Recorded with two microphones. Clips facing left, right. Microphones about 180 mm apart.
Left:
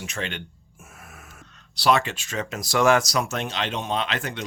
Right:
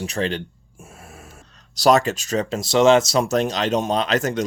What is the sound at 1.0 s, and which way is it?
Gasp, 30° right (ahead or behind).